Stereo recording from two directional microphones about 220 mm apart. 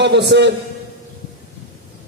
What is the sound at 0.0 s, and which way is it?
Speech, 50° right (ahead or behind).